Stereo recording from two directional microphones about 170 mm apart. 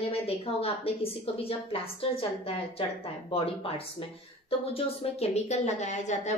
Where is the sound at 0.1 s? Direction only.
35° left (ahead or behind).